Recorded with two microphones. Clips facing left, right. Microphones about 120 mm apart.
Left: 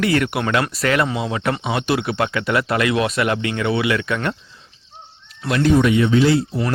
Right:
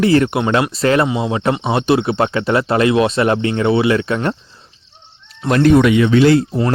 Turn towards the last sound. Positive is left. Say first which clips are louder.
# right 4 dB
turn(degrees=-60)  # may be behind; listen again after turning